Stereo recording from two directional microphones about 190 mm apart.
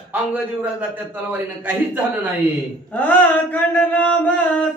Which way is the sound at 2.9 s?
10° left (ahead or behind).